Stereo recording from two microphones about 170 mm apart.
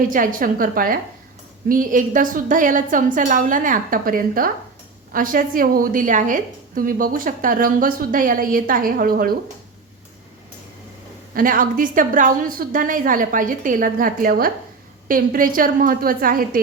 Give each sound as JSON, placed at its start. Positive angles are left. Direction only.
{"t": 0.1, "sound": "a woman's voice", "side_deg": -55}
{"t": 11.3, "sound": "a woman's voice", "side_deg": -55}